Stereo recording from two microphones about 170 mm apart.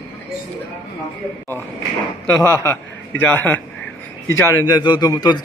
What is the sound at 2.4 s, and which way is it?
A man's voice, 15° left (ahead or behind).